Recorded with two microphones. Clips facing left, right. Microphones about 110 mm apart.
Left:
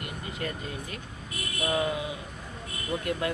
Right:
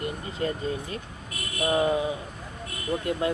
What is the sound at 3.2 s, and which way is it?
Speech, 30° right (ahead or behind).